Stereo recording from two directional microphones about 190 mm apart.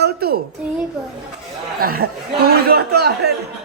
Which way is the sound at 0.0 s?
55° right (ahead or behind).